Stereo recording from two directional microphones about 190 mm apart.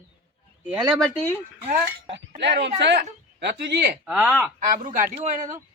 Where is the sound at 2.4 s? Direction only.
65° right (ahead or behind).